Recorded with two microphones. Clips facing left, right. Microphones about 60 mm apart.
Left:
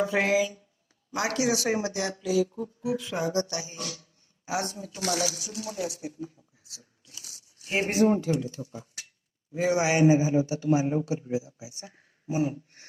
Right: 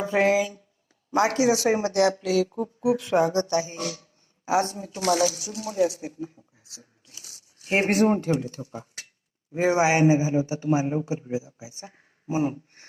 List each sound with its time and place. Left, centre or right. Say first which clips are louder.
0.1 s a man's voice: right 3 dB; right
1.9 s speech: right 7 dB; right
2.6 s speech: right 6 dB; right
3.3 s a man's voice: right 5 dB; right
3.8 s speech: right 6 dB; right
4.4 s a man's voice: right 7 dB; right
4.9 s speech: right 7 dB; right
7.3 s speech: right 7 dB; right
9.5 s a man's voice: right 4 dB; right